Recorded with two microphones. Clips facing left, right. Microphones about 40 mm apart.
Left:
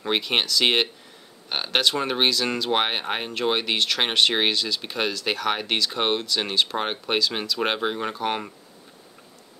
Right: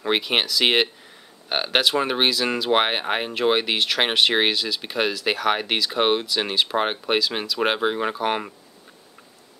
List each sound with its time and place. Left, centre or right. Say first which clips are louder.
0.0 s speech: right 2 dB; centre